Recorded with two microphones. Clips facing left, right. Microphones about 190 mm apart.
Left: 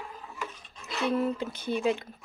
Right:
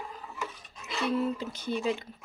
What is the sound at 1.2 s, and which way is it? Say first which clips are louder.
Speech: left 1 dB; 55° left (ahead or behind).